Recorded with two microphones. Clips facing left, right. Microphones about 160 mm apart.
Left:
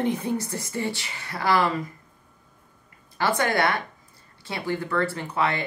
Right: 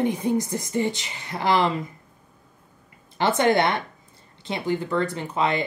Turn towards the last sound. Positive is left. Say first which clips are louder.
# right 2 dB
turn(degrees=-20)  # may be behind; listen again after turning